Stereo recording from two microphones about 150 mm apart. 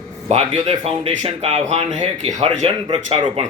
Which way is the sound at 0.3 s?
45° right (ahead or behind).